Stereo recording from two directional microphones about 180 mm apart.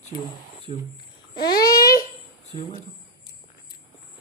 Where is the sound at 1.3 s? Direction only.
20° left (ahead or behind).